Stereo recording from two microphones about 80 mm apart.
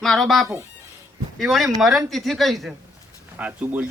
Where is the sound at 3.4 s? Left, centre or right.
Centre.